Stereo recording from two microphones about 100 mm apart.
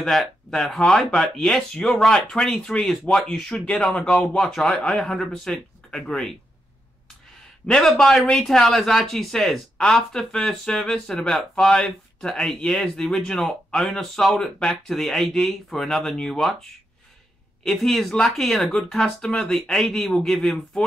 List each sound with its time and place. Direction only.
0.0 s speech: 5° left (ahead or behind)
7.6 s speech: 5° left (ahead or behind)
17.6 s speech: 5° left (ahead or behind)